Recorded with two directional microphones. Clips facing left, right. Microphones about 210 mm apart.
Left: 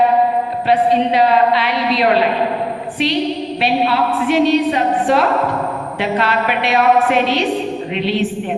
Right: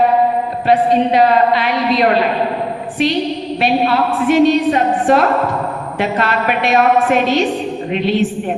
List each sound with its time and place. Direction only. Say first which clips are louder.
0.7 s a woman's voice: right 2 dB; 45° right (ahead or behind)
3.6 s a woman's voice: right 2 dB; 45° right (ahead or behind)